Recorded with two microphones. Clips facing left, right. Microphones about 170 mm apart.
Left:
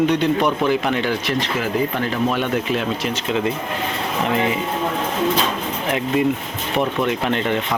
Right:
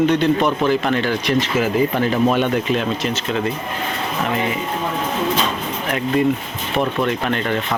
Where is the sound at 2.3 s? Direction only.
5° left (ahead or behind).